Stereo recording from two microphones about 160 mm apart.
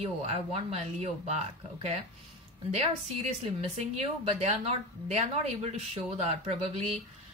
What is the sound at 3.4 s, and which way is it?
Speech, 40° right (ahead or behind).